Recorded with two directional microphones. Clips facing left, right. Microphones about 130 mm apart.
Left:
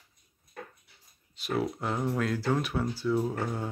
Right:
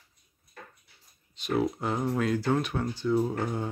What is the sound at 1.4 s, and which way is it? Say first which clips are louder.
Speech: right 3 dB; centre (ahead or behind).